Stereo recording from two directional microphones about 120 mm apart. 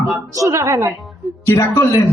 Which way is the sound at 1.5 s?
25° left (ahead or behind).